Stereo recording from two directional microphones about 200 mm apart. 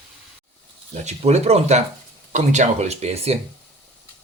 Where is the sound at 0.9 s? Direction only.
35° right (ahead or behind).